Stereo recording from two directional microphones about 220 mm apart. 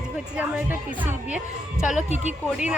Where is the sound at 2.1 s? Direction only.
30° right (ahead or behind).